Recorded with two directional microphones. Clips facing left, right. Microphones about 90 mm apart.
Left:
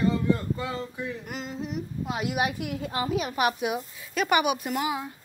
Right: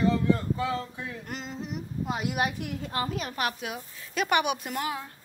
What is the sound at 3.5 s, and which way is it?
Speech, 15° left (ahead or behind).